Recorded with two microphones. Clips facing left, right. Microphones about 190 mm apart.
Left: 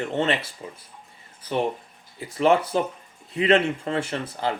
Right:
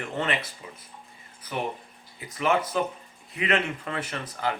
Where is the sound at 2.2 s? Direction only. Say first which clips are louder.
Left 5 dB; 30° left (ahead or behind).